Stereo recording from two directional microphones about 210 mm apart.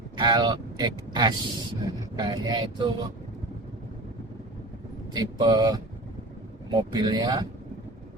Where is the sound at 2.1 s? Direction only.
20° right (ahead or behind).